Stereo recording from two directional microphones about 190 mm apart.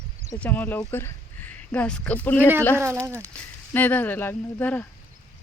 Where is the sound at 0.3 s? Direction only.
10° left (ahead or behind).